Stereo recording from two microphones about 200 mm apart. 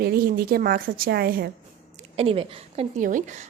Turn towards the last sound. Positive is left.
turn(degrees=-40)  # may be behind; listen again after turning